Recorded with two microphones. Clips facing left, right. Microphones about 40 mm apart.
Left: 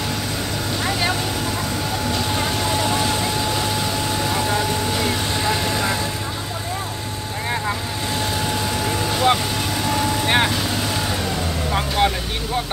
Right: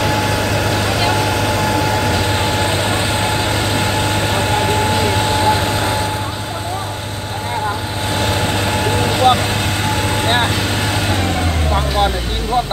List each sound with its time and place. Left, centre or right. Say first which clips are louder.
0.0 s vehicle: right 9 dB; right
2.5 s vehicle: right 4 dB; right
8.2 s vehicle: right 6 dB; right